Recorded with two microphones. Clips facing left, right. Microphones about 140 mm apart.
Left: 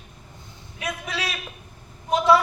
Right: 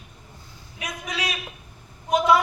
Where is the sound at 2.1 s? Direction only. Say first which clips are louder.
Left 1 dB; 30° left (ahead or behind).